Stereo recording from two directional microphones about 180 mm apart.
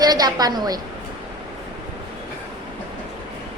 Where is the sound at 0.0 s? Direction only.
20° right (ahead or behind).